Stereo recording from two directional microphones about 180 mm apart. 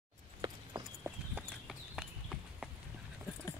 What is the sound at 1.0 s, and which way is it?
Horse, 5° right (ahead or behind).